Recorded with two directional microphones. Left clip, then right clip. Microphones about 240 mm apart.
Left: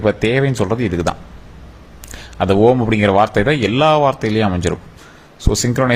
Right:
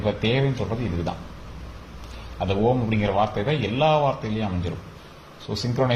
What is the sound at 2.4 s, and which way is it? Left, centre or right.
A man's voice, left.